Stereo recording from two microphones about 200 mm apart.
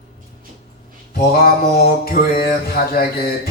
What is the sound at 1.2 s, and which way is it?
Music, 50° left (ahead or behind).